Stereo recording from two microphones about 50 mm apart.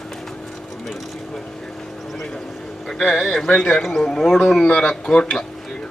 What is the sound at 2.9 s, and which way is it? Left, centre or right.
Speech, centre.